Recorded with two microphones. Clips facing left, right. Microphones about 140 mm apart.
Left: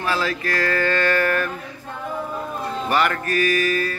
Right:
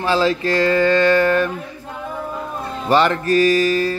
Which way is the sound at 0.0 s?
25° right (ahead or behind).